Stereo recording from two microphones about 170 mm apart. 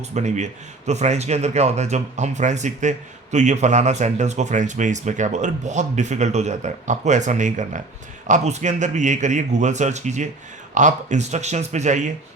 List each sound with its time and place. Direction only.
0.1 s speech: 40° right (ahead or behind)